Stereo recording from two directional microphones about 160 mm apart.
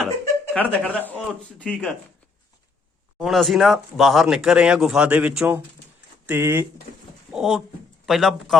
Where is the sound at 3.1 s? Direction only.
Centre (ahead or behind).